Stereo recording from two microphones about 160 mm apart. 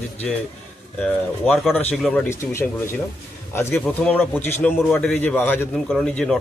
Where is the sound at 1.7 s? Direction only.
10° left (ahead or behind).